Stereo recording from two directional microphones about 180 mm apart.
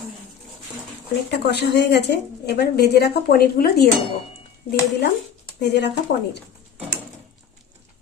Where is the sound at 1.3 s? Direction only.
65° left (ahead or behind).